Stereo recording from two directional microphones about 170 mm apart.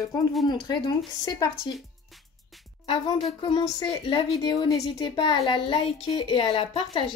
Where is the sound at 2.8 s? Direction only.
30° left (ahead or behind).